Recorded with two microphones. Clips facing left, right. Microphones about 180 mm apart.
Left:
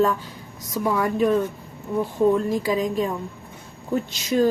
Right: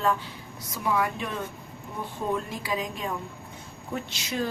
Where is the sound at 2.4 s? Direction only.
40° left (ahead or behind).